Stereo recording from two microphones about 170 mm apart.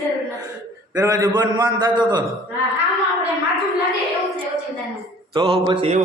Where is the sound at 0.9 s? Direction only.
15° right (ahead or behind).